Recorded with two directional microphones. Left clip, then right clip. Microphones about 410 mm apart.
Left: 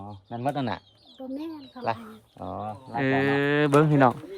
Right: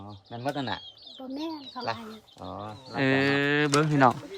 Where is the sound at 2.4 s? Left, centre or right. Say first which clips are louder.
Left 5 dB; centre.